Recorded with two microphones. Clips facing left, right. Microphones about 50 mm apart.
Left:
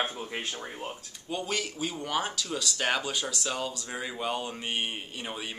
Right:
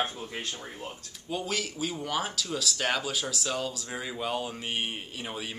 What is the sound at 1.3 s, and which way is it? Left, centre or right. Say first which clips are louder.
Speech: even; centre.